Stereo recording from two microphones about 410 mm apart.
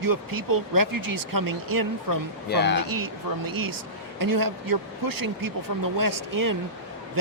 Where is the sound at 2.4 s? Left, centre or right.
Left.